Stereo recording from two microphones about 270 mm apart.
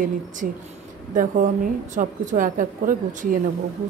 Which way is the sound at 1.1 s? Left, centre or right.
Right.